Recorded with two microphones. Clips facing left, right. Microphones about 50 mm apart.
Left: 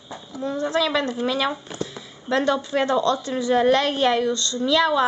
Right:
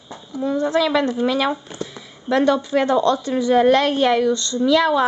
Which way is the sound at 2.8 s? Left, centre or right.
Right.